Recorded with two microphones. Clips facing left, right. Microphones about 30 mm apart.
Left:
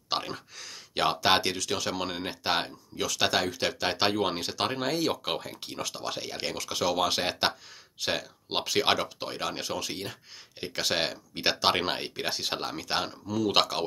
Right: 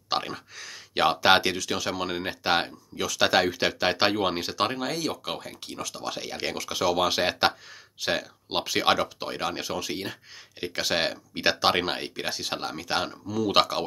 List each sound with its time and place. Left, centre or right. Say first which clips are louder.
0.3 s speech: right 2 dB; centre
3.3 s speech: right 6 dB; centre
4.9 s speech: left 2 dB; centre
5.8 s speech: left 1 dB; centre
6.0 s speech: right 4 dB; centre